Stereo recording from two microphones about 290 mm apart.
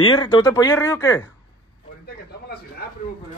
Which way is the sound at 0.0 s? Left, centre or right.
Centre.